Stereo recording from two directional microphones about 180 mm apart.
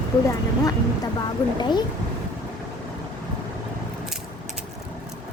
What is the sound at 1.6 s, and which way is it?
Speech, 25° left (ahead or behind).